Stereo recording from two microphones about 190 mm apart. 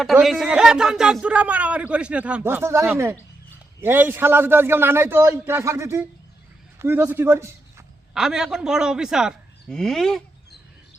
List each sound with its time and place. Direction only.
0.0 s a man's voice: centre (ahead or behind)
8.1 s a man's voice: 5° right (ahead or behind)